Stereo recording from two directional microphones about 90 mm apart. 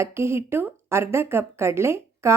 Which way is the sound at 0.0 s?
30° right (ahead or behind).